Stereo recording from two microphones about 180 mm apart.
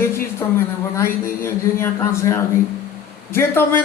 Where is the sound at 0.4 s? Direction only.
20° left (ahead or behind).